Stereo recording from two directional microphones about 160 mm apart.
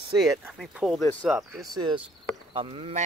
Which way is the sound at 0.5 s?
Centre (ahead or behind).